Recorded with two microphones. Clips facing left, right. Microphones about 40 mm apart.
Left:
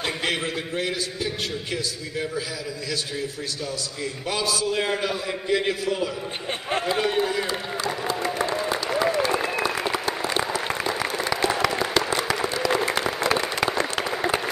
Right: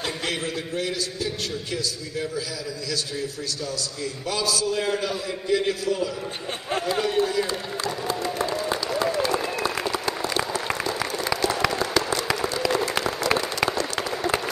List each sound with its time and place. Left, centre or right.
0.0 s a man's voice: left
4.0 s a man's voice: left
9.0 s applause: left
11.9 s applause: left